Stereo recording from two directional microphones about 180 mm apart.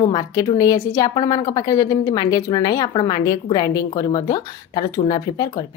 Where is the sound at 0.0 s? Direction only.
25° left (ahead or behind).